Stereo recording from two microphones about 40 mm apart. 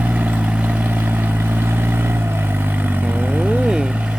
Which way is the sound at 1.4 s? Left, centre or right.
Right.